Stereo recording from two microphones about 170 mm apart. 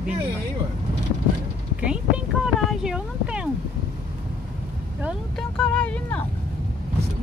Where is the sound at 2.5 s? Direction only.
5° right (ahead or behind).